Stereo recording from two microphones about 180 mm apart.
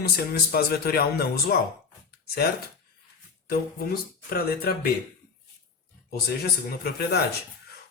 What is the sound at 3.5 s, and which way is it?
Speech, 55° left (ahead or behind).